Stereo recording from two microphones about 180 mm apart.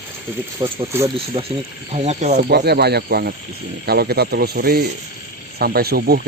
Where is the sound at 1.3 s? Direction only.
40° right (ahead or behind).